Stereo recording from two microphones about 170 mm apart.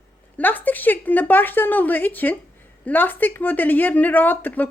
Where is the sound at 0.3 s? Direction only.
10° left (ahead or behind).